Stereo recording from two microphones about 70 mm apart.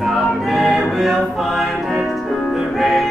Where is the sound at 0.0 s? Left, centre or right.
Centre.